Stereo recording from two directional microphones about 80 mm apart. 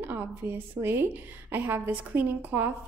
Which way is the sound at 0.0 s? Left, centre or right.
Right.